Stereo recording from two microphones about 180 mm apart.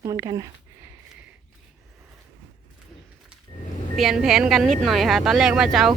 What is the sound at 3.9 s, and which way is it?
Speech, centre (ahead or behind).